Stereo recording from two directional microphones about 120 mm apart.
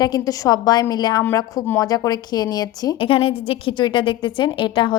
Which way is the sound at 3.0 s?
50° left (ahead or behind).